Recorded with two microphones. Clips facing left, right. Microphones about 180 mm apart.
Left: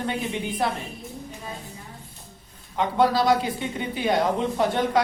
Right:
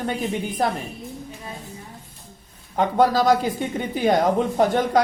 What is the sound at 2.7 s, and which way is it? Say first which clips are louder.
A woman's voice: right 3 dB; 45° right (ahead or behind).